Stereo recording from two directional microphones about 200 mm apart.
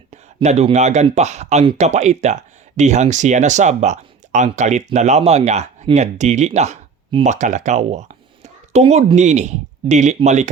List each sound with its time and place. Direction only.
0.1 s speech: 35° right (ahead or behind)